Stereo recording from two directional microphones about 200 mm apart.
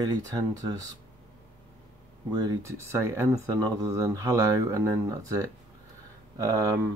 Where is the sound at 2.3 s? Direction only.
15° right (ahead or behind).